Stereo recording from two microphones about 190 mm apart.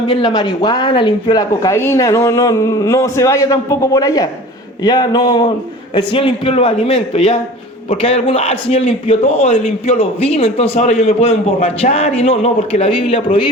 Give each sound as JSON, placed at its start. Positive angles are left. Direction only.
{"t": 0.1, "sound": "a man's voice", "side_deg": 25}